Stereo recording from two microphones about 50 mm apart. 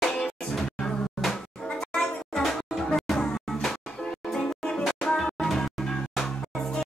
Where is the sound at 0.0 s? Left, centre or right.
Centre.